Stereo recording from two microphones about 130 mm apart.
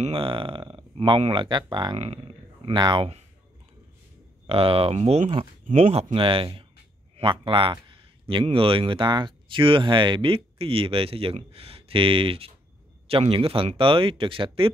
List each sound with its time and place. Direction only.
0.1 s speech: 40° right (ahead or behind)
2.0 s speech: 50° right (ahead or behind)
4.5 s speech: 45° right (ahead or behind)